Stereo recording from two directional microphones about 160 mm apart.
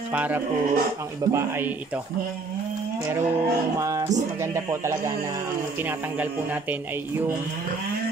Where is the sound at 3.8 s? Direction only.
20° right (ahead or behind).